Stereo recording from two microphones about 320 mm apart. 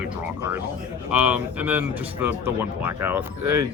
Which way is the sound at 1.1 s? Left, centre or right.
Centre.